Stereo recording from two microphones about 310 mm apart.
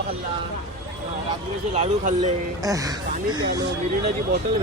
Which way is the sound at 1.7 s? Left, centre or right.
Right.